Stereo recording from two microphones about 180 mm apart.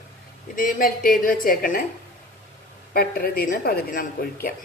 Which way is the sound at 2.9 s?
55° left (ahead or behind).